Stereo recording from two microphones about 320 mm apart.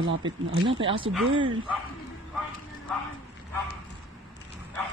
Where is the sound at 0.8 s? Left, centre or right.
Centre.